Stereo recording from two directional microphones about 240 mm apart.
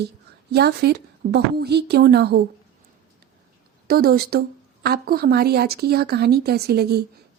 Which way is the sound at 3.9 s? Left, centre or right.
Right.